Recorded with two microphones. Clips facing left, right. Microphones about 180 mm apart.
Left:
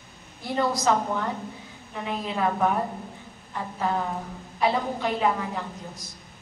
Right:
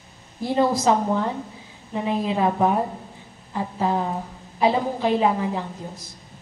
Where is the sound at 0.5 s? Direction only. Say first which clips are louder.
Right 4 dB; 25° right (ahead or behind).